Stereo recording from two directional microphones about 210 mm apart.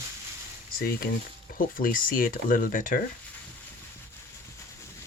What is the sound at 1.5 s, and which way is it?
Speech, 40° left (ahead or behind).